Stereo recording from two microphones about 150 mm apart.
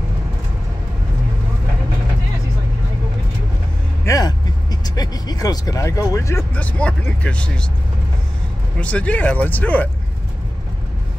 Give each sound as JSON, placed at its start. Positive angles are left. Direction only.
{"t": 4.0, "sound": "speech", "side_deg": 25}
{"t": 8.8, "sound": "speech", "side_deg": 10}